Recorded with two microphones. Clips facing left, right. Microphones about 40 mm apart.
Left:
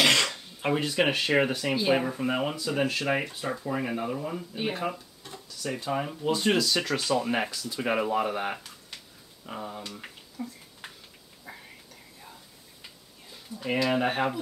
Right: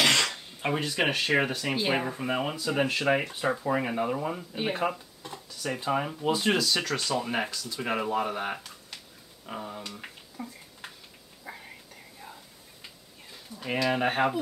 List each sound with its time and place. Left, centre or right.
0.2 s speech: centre
2.7 s speech: centre
5.2 s speech: right; by 6.8 s centre
6.8 s speech: centre
10.4 s speech: right
11.5 s whispering: centre
13.3 s a sound: centre
13.7 s speech: centre